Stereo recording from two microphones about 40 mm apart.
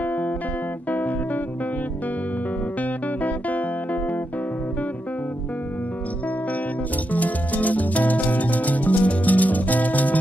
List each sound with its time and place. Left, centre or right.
0.8 s music: left
2.8 s music: left
7.1 s music: left